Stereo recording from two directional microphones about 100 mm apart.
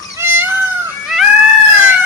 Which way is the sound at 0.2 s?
20° right (ahead or behind).